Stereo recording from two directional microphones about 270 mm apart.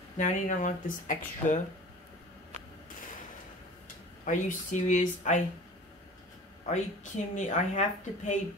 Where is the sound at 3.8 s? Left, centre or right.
Left.